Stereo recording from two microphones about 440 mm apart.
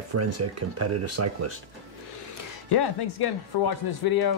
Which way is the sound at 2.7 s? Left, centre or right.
Left.